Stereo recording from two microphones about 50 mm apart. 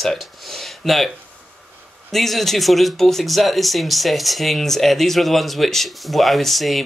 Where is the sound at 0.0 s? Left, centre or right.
Centre.